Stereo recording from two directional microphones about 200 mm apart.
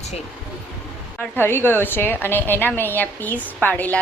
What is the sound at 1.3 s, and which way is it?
A woman's voice, 10° left (ahead or behind).